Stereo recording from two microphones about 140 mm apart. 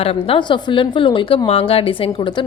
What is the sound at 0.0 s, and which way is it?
A woman's voice, 45° left (ahead or behind).